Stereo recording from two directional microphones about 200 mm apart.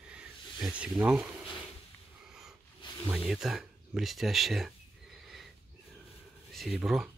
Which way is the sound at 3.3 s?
Centre (ahead or behind).